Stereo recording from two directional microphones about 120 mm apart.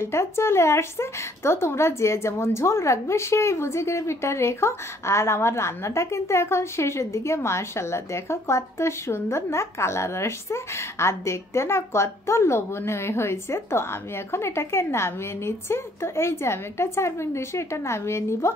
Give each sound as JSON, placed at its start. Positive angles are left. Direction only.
{"t": 0.0, "sound": "a woman's voice", "side_deg": 20}